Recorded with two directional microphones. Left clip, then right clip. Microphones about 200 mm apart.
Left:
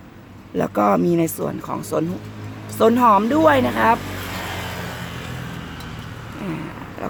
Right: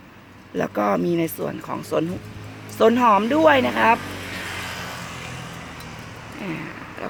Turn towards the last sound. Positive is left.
turn(degrees=0)  # may be behind; listen again after turning